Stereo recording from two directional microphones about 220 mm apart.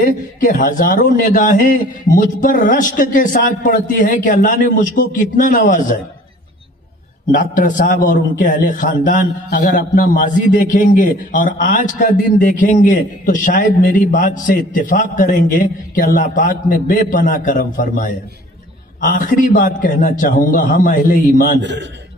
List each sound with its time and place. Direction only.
0.0 s a man's voice: 35° left (ahead or behind)
7.2 s a man's voice: 35° left (ahead or behind)
21.5 s a man's voice: 55° right (ahead or behind)